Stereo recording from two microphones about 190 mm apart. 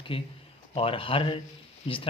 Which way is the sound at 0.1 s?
25° left (ahead or behind).